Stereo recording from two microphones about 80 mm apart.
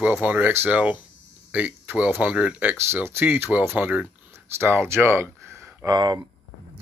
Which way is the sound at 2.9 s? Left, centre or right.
Right.